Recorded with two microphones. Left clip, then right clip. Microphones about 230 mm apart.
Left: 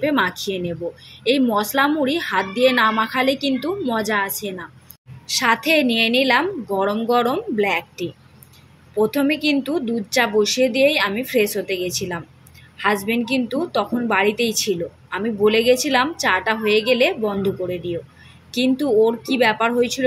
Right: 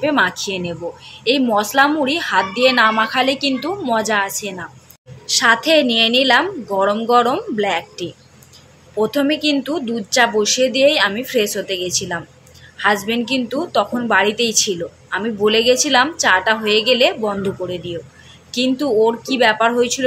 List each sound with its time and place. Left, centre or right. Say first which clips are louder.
0.0 s a woman's voice: right 3 dB; left